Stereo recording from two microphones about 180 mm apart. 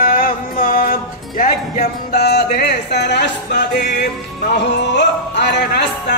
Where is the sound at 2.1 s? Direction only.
65° left (ahead or behind).